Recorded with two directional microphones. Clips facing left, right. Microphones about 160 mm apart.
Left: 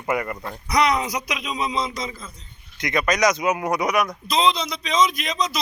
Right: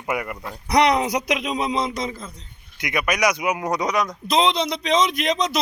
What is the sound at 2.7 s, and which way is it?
A man's voice, 10° right (ahead or behind).